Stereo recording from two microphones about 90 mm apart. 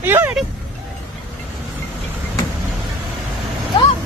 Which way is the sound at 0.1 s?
30° right (ahead or behind).